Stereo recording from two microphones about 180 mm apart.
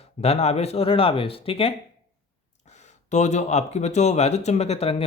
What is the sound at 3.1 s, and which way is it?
Speech, 40° left (ahead or behind).